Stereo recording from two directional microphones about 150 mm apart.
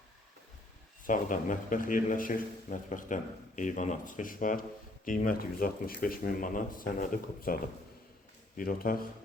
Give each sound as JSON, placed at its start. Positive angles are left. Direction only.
{"t": 1.0, "sound": "a man's voice", "side_deg": 60}